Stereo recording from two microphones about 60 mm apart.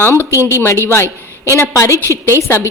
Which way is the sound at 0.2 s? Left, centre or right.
Right.